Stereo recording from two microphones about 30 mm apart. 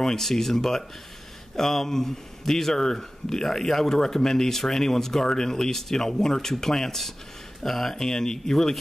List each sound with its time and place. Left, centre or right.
0.0 s speech: centre